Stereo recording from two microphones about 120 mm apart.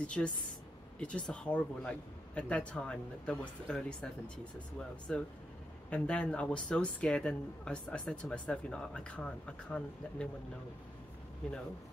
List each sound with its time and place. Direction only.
0.0 s speech: 10° left (ahead or behind)